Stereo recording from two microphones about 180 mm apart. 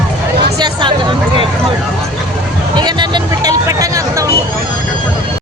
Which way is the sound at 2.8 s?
25° right (ahead or behind).